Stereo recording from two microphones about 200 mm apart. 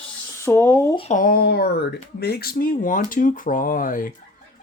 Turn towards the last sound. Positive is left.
turn(degrees=45)  # may be behind; listen again after turning